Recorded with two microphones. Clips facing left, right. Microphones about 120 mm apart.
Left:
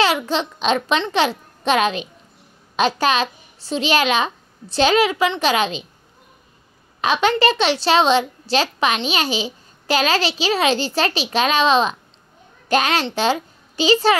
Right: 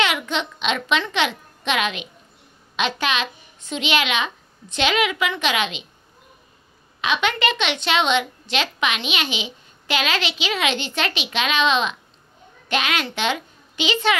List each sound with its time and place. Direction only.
0.0 s a child's voice: 35° left (ahead or behind)
7.0 s a woman's voice: 35° left (ahead or behind)